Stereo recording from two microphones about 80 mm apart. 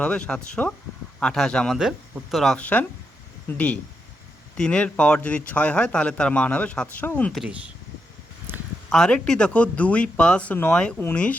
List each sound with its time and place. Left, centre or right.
0.0 s a man's voice: centre
1.8 s speech: centre
2.6 s a man's voice: centre
8.5 s a sound: right
8.9 s a man's voice: centre